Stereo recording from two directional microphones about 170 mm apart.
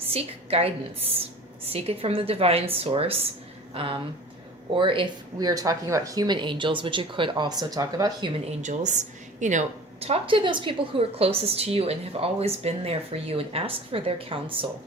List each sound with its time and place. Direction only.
0.0 s a woman's voice: 35° right (ahead or behind)
8.6 s a woman's voice: 45° right (ahead or behind)